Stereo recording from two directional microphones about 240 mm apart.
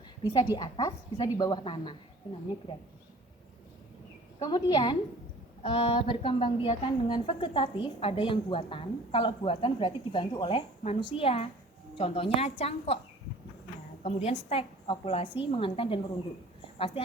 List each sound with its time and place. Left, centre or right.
0.5 s a woman's voice: centre
4.4 s a woman's voice: centre
14.0 s a woman's voice: left